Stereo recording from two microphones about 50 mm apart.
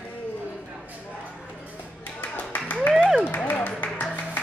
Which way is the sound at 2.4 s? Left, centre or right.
Left.